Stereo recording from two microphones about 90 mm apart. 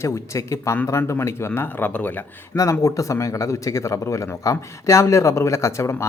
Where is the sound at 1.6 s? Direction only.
20° left (ahead or behind).